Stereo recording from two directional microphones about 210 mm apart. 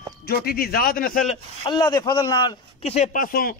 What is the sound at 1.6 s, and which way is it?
Speech, 20° left (ahead or behind).